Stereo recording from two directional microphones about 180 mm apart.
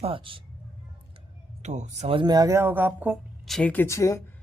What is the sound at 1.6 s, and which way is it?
Speech, 40° right (ahead or behind).